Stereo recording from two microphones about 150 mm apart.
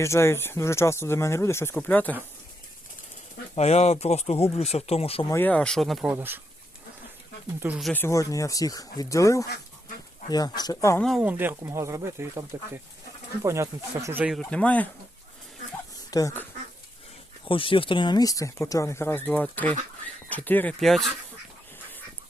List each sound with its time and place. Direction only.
0.0 s speech: 20° left (ahead or behind)
3.5 s speech: 45° left (ahead or behind)
5.3 s speech: 10° left (ahead or behind)
6.1 s speech: 15° right (ahead or behind)
7.7 s speech: centre (ahead or behind)
7.9 s speech: 20° left (ahead or behind)
11.2 s speech: 10° right (ahead or behind)
14.3 s speech: 5° left (ahead or behind)
16.1 s speech: 20° left (ahead or behind)
17.4 s speech: 35° left (ahead or behind); by 21.1 s centre (ahead or behind)